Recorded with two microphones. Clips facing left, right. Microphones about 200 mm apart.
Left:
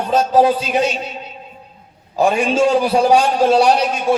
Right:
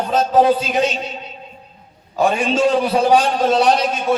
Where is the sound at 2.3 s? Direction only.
35° right (ahead or behind).